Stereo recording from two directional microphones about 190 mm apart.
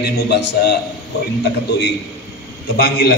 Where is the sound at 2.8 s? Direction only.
55° left (ahead or behind).